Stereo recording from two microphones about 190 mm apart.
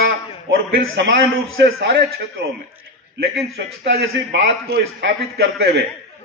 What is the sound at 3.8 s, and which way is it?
A man's voice, 60° right (ahead or behind).